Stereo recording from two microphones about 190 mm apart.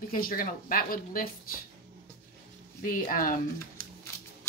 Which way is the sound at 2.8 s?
45° left (ahead or behind).